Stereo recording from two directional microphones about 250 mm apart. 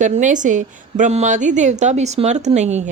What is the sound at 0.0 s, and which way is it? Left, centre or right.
Speech, right.